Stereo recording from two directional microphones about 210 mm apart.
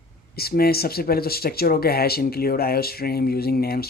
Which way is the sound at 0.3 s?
45° left (ahead or behind).